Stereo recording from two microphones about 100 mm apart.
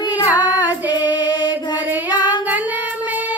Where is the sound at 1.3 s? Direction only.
45° left (ahead or behind).